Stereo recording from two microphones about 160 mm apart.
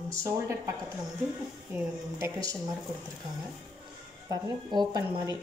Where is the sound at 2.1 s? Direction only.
20° right (ahead or behind).